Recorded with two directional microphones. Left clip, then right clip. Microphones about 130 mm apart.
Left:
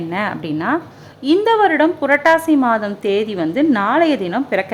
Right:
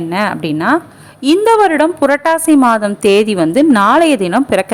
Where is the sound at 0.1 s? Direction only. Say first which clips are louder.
Right 6 dB; 30° right (ahead or behind).